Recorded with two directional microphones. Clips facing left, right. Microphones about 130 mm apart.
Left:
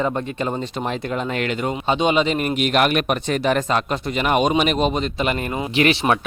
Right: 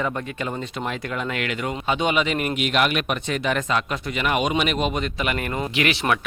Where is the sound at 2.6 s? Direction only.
45° left (ahead or behind).